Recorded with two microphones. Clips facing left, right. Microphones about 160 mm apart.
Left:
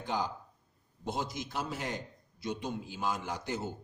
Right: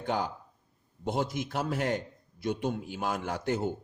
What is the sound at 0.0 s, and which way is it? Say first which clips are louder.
A man's voice: right 3 dB; 55° right (ahead or behind).